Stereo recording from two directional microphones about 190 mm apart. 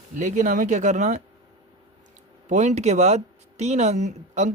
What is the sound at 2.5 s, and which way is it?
Speech, 40° right (ahead or behind).